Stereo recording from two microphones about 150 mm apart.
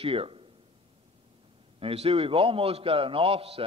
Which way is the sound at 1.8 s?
40° right (ahead or behind).